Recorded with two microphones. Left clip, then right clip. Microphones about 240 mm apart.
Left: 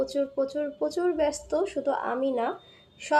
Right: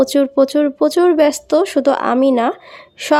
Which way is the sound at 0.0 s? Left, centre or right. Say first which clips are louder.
Right 14 dB; right.